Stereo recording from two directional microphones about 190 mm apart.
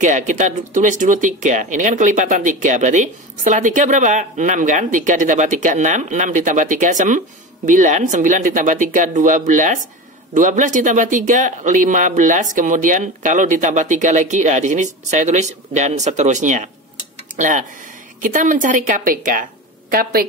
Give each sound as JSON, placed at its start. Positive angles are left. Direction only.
{"t": 0.0, "sound": "a woman's voice", "side_deg": -40}